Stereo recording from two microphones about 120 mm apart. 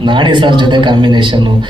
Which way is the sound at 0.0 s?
40° right (ahead or behind).